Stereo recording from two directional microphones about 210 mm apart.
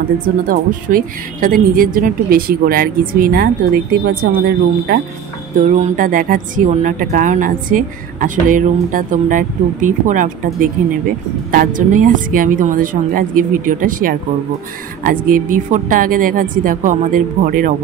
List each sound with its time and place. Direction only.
0.5 s a woman's voice: 40° right (ahead or behind)